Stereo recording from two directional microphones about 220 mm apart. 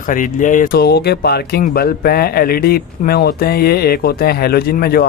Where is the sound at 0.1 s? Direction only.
35° left (ahead or behind).